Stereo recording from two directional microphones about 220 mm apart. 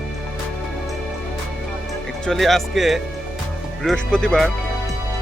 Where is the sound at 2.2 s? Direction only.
Centre (ahead or behind).